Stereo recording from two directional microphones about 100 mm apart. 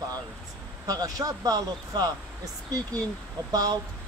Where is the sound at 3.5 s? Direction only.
40° right (ahead or behind).